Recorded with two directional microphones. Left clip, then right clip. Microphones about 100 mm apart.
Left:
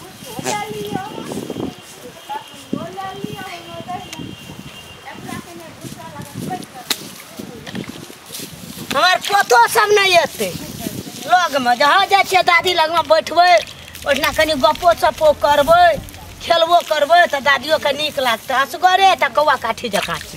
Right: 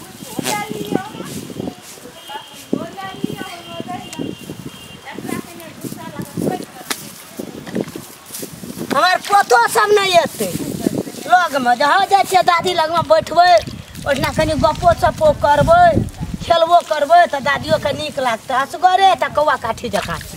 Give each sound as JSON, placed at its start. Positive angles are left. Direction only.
{"t": 0.4, "sound": "a sound", "side_deg": -45}
{"t": 2.7, "sound": "clip-clop", "side_deg": -55}
{"t": 6.9, "sound": "whip", "side_deg": 5}
{"t": 8.8, "sound": "speech", "side_deg": 0}